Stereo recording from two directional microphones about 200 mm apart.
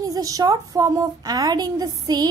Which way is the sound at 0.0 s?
15° right (ahead or behind).